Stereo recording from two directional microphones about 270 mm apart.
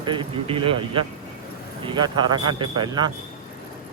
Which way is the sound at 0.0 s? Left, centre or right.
Centre.